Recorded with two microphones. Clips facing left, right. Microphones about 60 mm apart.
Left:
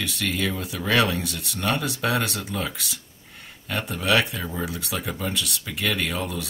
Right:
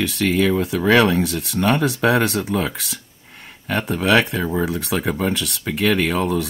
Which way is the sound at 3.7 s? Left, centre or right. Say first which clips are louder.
Right 6 dB; right.